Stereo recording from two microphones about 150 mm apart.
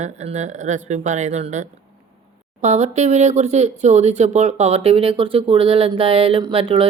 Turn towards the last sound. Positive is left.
turn(degrees=-40)  # may be behind; listen again after turning